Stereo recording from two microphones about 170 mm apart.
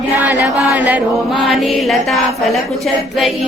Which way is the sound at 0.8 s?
10° right (ahead or behind).